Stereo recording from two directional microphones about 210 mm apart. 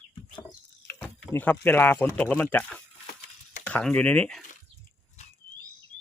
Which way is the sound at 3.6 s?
5° left (ahead or behind).